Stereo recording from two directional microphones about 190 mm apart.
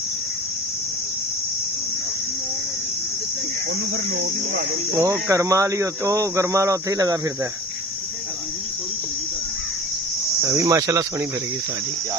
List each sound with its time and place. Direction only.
4.9 s cricket: 15° right (ahead or behind)
10.4 s cricket: 15° right (ahead or behind)